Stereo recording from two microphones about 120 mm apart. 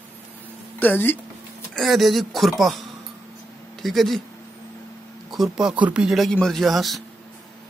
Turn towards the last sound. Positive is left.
turn(degrees=0)  # may be behind; listen again after turning